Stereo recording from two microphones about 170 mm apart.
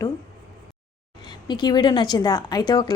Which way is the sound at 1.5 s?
25° left (ahead or behind).